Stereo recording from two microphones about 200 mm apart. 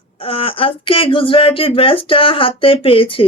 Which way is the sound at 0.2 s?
30° left (ahead or behind).